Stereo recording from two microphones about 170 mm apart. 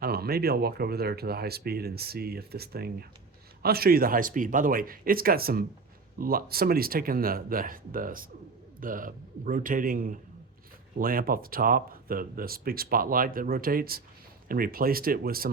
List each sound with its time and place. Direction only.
0.0 s a man's voice: 65° right (ahead or behind)